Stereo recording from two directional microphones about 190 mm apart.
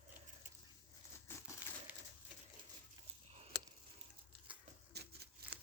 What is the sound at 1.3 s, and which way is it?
Crumpling, 10° left (ahead or behind).